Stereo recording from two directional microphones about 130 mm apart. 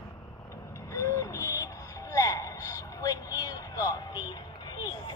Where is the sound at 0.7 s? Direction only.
25° left (ahead or behind).